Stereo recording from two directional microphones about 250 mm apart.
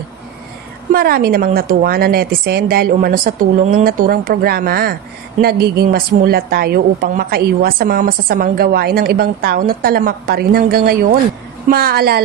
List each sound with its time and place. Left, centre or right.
0.9 s a woman's voice: right